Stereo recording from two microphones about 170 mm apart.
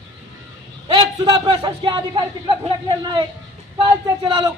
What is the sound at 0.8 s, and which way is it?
A man's voice, 25° right (ahead or behind).